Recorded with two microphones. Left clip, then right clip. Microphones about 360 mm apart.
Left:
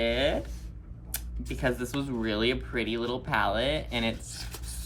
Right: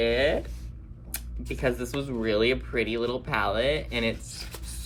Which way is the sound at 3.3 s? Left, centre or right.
Left.